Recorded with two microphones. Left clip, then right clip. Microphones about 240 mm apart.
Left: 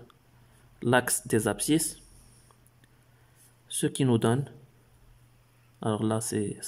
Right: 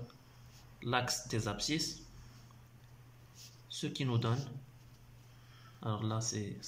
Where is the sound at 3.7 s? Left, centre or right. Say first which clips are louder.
Left 12 dB; left.